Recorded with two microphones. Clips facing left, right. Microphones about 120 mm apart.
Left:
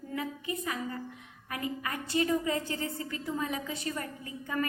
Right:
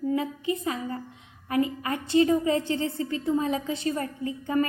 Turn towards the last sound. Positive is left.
turn(degrees=-25)  # may be behind; listen again after turning